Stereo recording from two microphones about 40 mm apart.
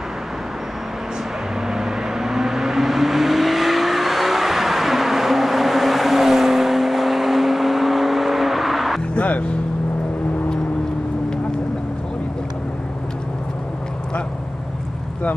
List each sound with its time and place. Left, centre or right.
1.7 s vehicle: centre
9.1 s music: left